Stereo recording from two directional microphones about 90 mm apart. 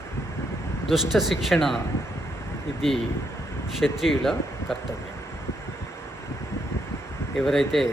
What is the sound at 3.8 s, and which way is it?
Speech, 5° right (ahead or behind).